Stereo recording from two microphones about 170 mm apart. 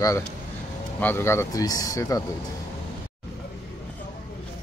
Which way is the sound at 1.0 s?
15° left (ahead or behind).